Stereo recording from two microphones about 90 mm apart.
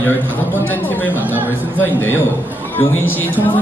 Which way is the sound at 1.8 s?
25° left (ahead or behind).